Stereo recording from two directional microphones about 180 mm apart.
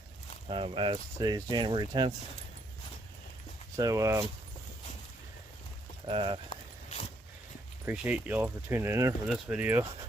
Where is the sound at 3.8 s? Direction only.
15° right (ahead or behind).